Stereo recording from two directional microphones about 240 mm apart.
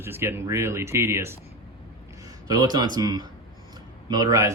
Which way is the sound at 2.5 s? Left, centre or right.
Centre.